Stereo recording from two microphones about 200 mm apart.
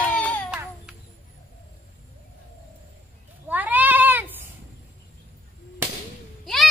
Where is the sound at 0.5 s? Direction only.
5° right (ahead or behind).